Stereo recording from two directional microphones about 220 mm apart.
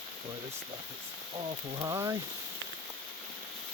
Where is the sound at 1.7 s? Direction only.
15° right (ahead or behind).